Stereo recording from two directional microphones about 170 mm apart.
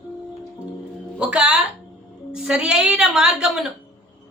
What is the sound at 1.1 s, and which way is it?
Speech, 5° right (ahead or behind).